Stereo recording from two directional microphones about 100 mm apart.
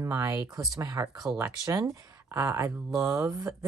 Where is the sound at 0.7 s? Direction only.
40° right (ahead or behind).